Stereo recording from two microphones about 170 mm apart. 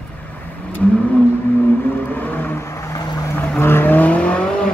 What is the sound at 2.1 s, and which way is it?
Vehicle, 10° left (ahead or behind).